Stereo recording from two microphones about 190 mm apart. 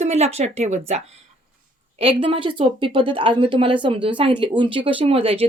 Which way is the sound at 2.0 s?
30° right (ahead or behind).